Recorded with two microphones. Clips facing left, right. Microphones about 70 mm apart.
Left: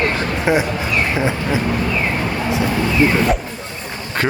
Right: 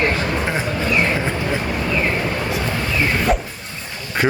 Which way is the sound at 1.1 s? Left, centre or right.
Centre.